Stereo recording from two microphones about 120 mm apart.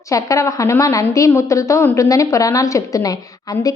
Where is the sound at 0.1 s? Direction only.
30° left (ahead or behind).